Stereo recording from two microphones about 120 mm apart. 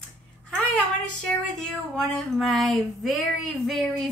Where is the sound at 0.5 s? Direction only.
5° left (ahead or behind).